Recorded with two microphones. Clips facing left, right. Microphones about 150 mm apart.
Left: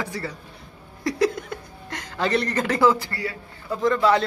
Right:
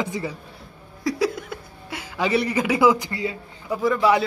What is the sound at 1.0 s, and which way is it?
Speech, centre (ahead or behind).